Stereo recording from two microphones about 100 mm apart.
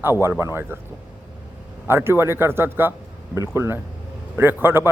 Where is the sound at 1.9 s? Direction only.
25° right (ahead or behind).